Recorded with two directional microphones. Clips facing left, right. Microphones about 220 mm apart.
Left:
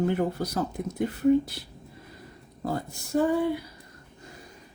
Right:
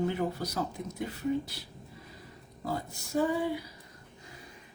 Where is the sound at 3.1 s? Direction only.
60° left (ahead or behind).